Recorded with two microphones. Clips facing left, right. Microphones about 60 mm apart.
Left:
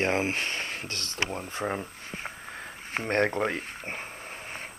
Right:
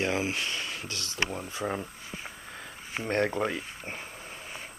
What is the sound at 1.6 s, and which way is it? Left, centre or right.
Speech, centre.